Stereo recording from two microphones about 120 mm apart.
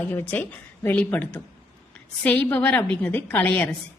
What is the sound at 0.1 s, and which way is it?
A woman's voice, 15° left (ahead or behind).